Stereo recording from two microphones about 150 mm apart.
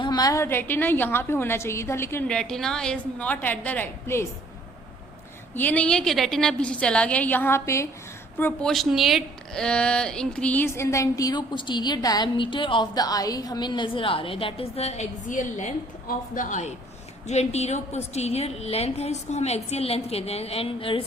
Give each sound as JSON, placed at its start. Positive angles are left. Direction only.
{"t": 0.0, "sound": "a woman's voice", "side_deg": 25}
{"t": 2.2, "sound": "a woman's voice", "side_deg": 5}
{"t": 5.5, "sound": "a woman's voice", "side_deg": 10}
{"t": 8.6, "sound": "a woman's voice", "side_deg": 0}